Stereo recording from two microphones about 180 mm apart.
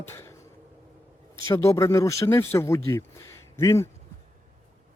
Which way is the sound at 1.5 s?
20° left (ahead or behind).